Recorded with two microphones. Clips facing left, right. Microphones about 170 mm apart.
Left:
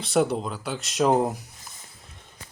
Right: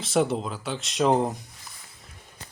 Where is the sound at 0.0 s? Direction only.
Centre (ahead or behind).